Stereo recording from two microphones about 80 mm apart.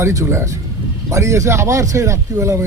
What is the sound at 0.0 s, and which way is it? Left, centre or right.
A man's voice, right.